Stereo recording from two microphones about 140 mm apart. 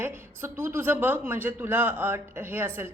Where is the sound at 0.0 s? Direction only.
15° right (ahead or behind).